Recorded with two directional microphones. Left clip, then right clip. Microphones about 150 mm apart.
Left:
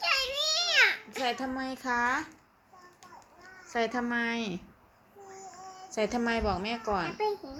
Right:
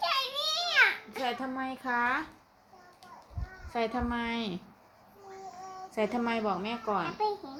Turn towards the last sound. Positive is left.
turn(degrees=-5)  # may be behind; listen again after turning